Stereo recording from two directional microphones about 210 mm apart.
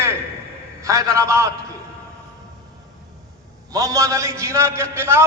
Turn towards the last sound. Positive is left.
turn(degrees=-10)  # may be behind; listen again after turning